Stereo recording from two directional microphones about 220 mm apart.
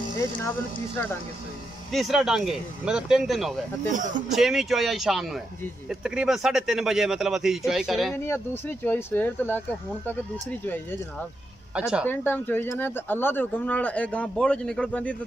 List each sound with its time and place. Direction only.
1.9 s a man's voice: centre (ahead or behind)
3.9 s speech: 35° right (ahead or behind)
4.3 s a man's voice: centre (ahead or behind)
8.1 s speech: 10° left (ahead or behind)
11.7 s a man's voice: 5° right (ahead or behind)
12.1 s speech: 10° left (ahead or behind)